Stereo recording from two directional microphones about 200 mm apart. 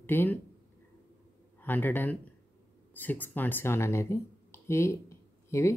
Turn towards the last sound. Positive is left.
turn(degrees=15)  # may be behind; listen again after turning